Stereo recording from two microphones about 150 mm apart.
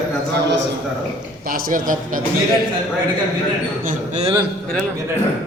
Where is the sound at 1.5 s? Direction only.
65° right (ahead or behind).